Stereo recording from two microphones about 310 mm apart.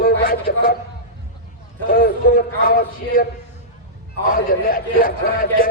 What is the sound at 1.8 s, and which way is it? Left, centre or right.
Speech, left.